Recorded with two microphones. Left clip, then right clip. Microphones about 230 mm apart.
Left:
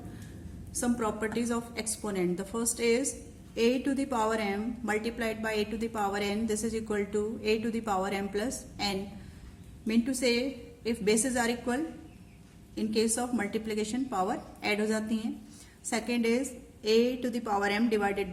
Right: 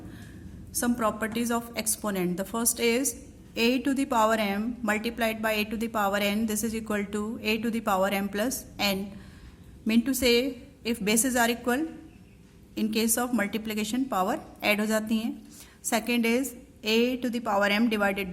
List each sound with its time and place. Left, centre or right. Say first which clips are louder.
0.7 s a woman's voice: right 4 dB; right